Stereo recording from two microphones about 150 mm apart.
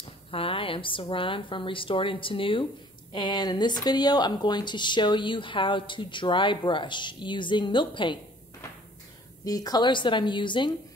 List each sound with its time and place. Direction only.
0.3 s speech: 40° left (ahead or behind)
9.4 s speech: 25° left (ahead or behind)